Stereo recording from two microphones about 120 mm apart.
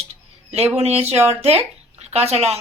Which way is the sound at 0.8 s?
65° right (ahead or behind).